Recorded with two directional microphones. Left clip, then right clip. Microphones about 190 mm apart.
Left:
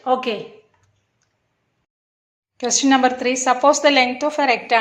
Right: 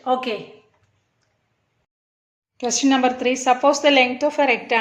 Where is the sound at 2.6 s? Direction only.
5° right (ahead or behind).